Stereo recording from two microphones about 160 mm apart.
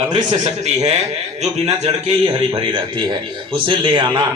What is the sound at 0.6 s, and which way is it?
A man's voice, 45° right (ahead or behind).